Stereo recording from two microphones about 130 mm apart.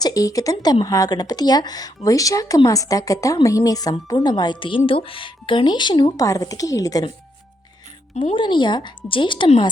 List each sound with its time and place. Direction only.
0.0 s a woman's voice: 25° left (ahead or behind)
8.2 s speech: 40° left (ahead or behind)